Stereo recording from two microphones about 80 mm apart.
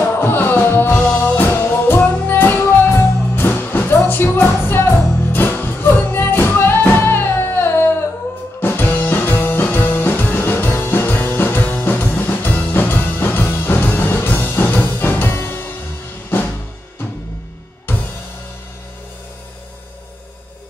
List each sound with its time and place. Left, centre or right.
0.0 s music: left
17.9 s music: left